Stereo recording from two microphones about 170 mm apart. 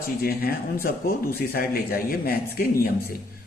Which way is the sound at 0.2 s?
65° left (ahead or behind).